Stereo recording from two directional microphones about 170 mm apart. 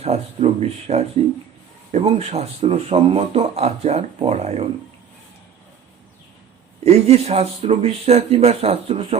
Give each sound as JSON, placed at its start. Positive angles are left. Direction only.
{"t": 0.0, "sound": "speech", "side_deg": -40}
{"t": 6.8, "sound": "speech", "side_deg": -40}